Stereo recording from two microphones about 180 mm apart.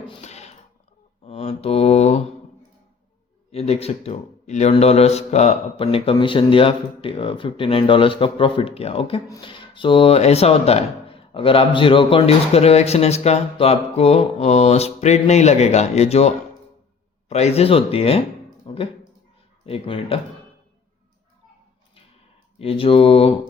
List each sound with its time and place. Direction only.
0.1 s a sound: 40° left (ahead or behind)
1.2 s mantra: 35° left (ahead or behind)
3.5 s speech: 35° left (ahead or behind)
22.5 s speech: 30° left (ahead or behind)